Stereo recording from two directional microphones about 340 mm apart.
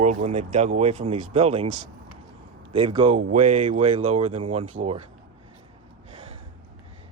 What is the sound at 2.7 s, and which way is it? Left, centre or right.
Speech, centre.